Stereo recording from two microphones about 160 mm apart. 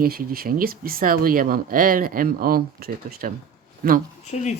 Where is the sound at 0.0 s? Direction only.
70° right (ahead or behind).